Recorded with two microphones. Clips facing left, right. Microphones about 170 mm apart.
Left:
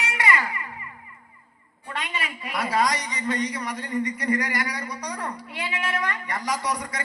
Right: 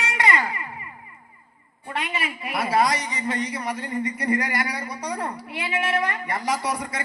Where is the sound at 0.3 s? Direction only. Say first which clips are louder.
Right 1 dB; 30° right (ahead or behind).